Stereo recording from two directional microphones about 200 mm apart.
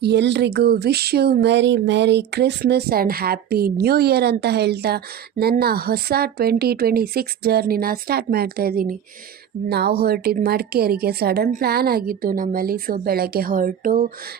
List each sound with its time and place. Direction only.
0.0 s speech: 60° right (ahead or behind)